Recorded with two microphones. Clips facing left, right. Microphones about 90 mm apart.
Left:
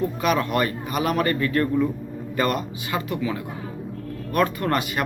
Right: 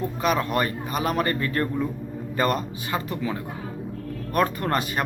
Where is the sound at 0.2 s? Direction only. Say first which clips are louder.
Even; 30° right (ahead or behind).